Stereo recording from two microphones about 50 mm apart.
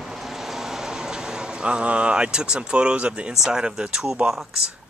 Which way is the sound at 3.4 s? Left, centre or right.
Centre.